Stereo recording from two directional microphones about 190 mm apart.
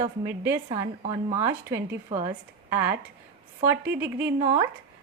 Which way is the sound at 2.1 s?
25° right (ahead or behind).